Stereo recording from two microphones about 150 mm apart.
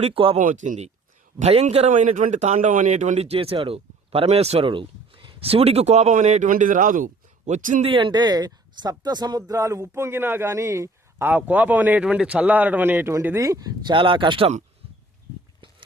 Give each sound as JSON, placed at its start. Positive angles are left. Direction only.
{"t": 0.0, "sound": "speech", "side_deg": -35}
{"t": 0.3, "sound": "a man's voice", "side_deg": -55}
{"t": 6.5, "sound": "a man's voice", "side_deg": -60}
{"t": 7.9, "sound": "speech", "side_deg": -35}